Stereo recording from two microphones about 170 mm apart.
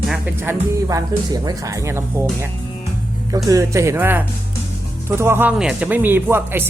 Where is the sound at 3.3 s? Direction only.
20° right (ahead or behind).